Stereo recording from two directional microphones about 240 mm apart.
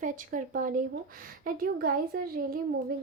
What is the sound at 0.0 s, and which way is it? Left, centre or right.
A woman's voice, right.